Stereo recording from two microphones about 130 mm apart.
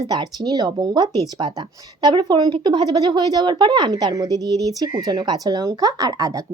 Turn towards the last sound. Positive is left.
turn(degrees=-30)  # may be behind; listen again after turning